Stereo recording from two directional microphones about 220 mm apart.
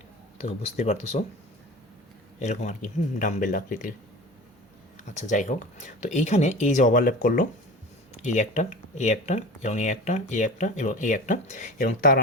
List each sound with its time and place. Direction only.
0.3 s speech: 30° left (ahead or behind)
2.4 s speech: 30° left (ahead or behind)
5.1 s speech: 35° left (ahead or behind)